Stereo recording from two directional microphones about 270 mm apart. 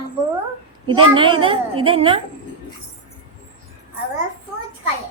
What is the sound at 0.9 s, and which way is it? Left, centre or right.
A woman's voice, centre.